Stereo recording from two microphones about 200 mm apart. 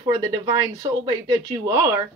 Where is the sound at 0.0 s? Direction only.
15° right (ahead or behind).